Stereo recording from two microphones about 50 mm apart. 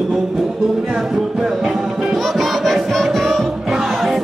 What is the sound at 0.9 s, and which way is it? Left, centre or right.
Music, centre.